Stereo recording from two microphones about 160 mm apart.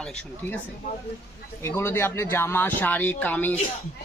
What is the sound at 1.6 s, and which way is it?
Speech, 15° left (ahead or behind).